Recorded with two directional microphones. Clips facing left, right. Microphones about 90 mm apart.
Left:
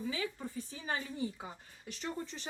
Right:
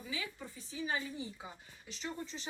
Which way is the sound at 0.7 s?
45° left (ahead or behind).